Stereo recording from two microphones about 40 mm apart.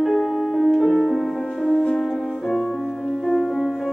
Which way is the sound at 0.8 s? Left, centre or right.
Centre.